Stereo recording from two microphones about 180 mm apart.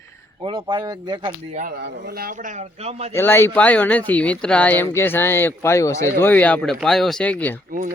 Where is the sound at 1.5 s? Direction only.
55° right (ahead or behind).